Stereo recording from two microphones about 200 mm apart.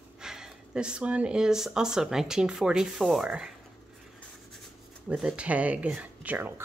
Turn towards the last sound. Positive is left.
turn(degrees=-10)  # may be behind; listen again after turning